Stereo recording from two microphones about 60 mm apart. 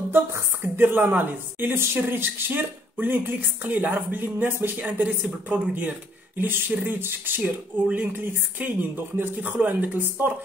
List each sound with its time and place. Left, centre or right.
0.1 s a woman's voice: right